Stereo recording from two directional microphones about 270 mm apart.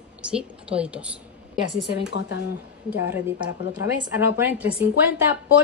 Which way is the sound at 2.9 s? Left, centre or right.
Centre.